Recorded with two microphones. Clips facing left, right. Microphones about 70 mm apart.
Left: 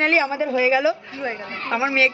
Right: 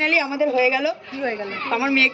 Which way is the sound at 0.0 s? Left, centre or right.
Left.